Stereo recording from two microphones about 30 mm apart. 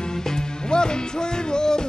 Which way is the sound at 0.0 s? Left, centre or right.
Centre.